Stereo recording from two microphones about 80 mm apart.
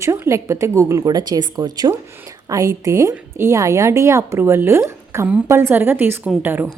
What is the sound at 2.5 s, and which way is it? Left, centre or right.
A woman's voice, right.